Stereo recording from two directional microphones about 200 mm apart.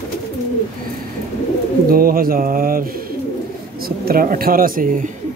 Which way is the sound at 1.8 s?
45° right (ahead or behind).